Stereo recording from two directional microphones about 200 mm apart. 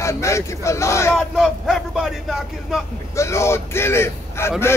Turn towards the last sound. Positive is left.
turn(degrees=10)  # may be behind; listen again after turning